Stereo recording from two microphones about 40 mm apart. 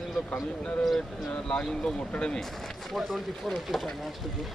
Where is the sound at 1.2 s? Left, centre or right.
Centre.